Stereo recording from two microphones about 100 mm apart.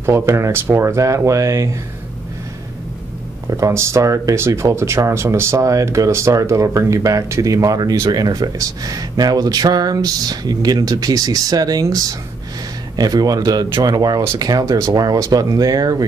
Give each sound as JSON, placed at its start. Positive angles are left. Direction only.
{"t": 0.0, "sound": "speech", "side_deg": -25}
{"t": 3.4, "sound": "speech", "side_deg": -30}